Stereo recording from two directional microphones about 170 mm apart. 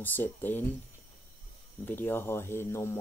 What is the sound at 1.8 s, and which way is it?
Speech, 10° left (ahead or behind).